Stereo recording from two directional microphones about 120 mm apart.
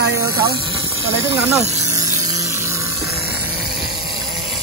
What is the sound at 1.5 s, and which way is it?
Vehicle, 25° right (ahead or behind).